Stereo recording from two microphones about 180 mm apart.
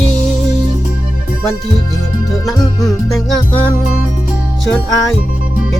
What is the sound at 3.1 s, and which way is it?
Speech, centre (ahead or behind).